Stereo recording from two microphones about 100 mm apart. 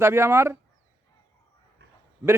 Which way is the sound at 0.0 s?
25° right (ahead or behind).